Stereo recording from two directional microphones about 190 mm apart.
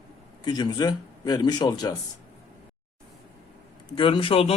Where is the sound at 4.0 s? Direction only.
25° left (ahead or behind).